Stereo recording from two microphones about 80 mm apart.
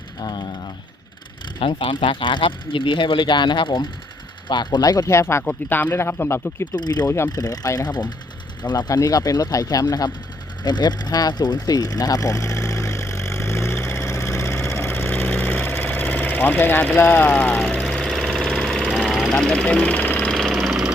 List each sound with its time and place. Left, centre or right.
0.2 s a sound: left
1.5 s speech: left
4.4 s speech: left
4.9 s speech: left
6.7 s speech: left
8.9 s speech: left
10.6 s a sound: left
17.0 s speech: left
17.2 s speech: centre
17.7 s engine: centre
18.9 s vehicle: centre
19.3 s speech: centre
20.3 s engine: centre